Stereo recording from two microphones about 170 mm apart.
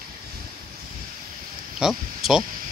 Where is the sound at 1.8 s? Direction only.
5° right (ahead or behind).